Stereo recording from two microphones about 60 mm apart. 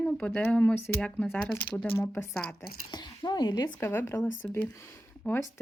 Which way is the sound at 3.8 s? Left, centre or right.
Left.